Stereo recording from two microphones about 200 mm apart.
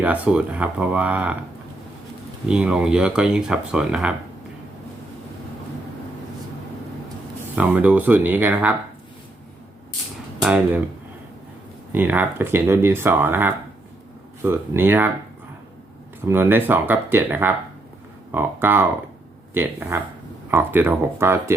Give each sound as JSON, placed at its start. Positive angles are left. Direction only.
{"t": 0.0, "sound": "speech", "side_deg": -5}
{"t": 2.5, "sound": "speech", "side_deg": -5}
{"t": 7.5, "sound": "speech", "side_deg": -10}
{"t": 10.4, "sound": "speech", "side_deg": -5}
{"t": 11.9, "sound": "speech", "side_deg": -10}
{"t": 16.3, "sound": "speech", "side_deg": -10}